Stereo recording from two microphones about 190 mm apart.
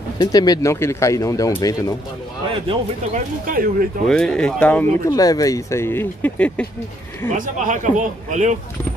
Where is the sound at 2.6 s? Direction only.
35° right (ahead or behind).